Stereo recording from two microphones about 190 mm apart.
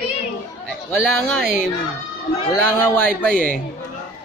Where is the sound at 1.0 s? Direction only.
5° left (ahead or behind).